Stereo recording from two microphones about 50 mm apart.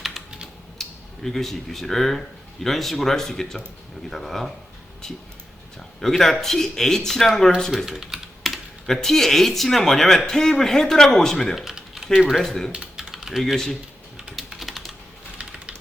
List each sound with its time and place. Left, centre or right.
0.8 s speech: centre
7.9 s speech: centre
8.4 s speech: centre
11.6 s typing: centre
12.3 s speech: centre
13.0 s typing: centre
13.4 s speech: centre
14.3 s typing: centre
15.4 s typing: right